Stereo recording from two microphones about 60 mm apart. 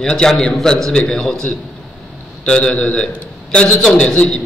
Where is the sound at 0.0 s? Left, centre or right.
Centre.